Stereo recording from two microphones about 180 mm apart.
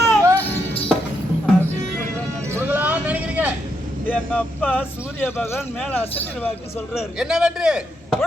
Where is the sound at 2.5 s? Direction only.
10° right (ahead or behind).